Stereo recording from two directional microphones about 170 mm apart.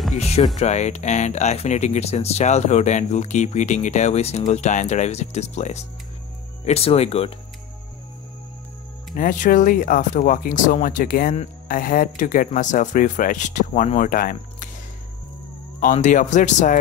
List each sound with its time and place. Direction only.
0.1 s speech: 40° left (ahead or behind)
9.1 s speech: 50° left (ahead or behind)
14.0 s speech: 55° left (ahead or behind)
15.8 s speech: 45° left (ahead or behind)